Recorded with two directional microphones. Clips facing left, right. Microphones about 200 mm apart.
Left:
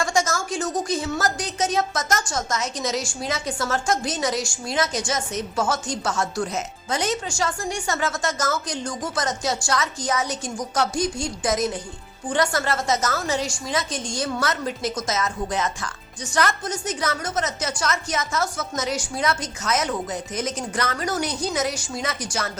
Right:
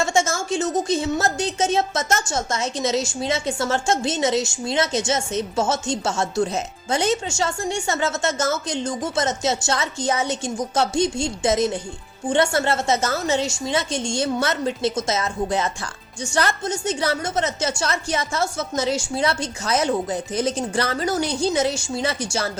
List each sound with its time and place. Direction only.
0.0 s a woman's voice: 25° right (ahead or behind)